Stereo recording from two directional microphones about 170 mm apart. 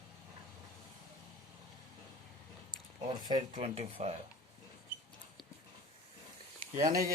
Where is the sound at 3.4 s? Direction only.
40° right (ahead or behind).